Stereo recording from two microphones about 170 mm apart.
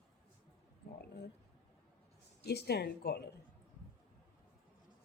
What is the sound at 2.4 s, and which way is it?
Speech, 75° left (ahead or behind).